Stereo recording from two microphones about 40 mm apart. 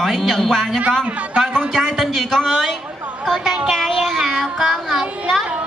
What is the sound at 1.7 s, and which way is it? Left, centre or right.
A man's voice, centre.